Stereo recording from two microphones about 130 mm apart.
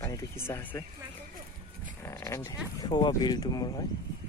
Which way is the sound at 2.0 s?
20° left (ahead or behind).